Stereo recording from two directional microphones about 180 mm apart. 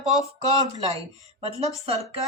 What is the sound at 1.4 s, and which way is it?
Speech, 35° right (ahead or behind).